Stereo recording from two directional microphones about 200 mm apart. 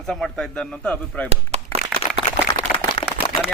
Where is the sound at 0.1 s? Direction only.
5° left (ahead or behind).